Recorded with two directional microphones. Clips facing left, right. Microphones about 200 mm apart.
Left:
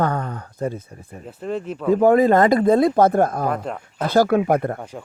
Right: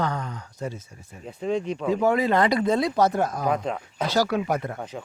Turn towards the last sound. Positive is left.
turn(degrees=0)  # may be behind; listen again after turning